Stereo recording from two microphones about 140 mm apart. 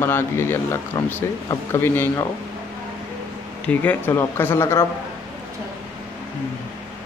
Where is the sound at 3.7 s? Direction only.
10° left (ahead or behind).